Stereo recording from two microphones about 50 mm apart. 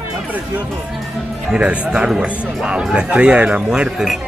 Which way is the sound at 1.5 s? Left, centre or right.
Centre.